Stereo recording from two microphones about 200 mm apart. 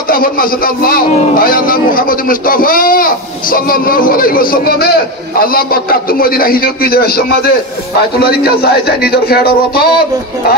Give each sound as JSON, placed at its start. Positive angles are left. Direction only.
{"t": 0.1, "sound": "a man's voice", "side_deg": 45}